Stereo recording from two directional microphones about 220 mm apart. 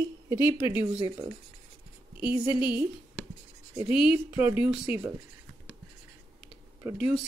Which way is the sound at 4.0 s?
5° right (ahead or behind).